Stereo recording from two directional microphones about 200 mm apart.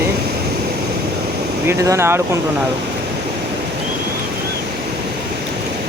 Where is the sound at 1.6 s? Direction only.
15° right (ahead or behind).